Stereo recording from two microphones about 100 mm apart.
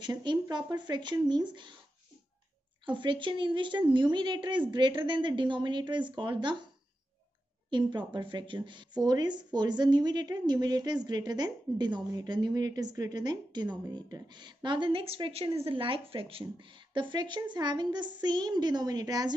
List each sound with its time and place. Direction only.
0.0 s a woman's voice: 50° right (ahead or behind)
2.8 s a woman's voice: 55° right (ahead or behind)
7.7 s a woman's voice: 50° right (ahead or behind)